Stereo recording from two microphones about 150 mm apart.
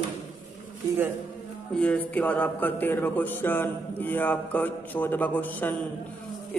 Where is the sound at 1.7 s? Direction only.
10° left (ahead or behind).